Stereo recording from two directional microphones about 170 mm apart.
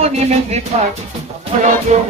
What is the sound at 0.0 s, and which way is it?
Music, 40° right (ahead or behind).